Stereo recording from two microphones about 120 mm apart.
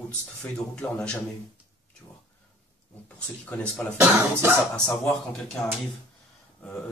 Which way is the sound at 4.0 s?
15° right (ahead or behind).